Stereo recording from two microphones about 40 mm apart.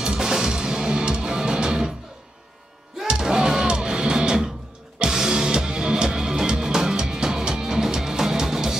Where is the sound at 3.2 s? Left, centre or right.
Centre.